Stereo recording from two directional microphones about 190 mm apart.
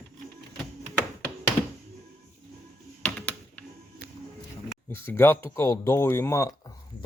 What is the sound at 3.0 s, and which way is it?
Typing, 5° left (ahead or behind).